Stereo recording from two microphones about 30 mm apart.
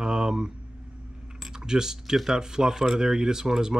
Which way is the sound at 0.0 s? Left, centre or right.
Right.